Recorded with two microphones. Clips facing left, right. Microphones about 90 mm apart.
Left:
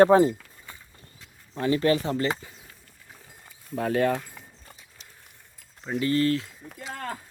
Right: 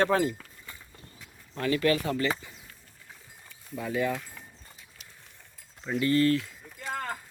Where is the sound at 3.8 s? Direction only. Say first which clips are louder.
Left 5 dB; 65° left (ahead or behind).